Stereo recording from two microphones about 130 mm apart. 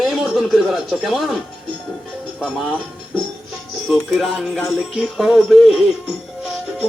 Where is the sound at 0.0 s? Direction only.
5° right (ahead or behind).